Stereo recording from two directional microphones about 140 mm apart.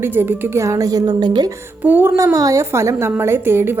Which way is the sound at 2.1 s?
25° right (ahead or behind).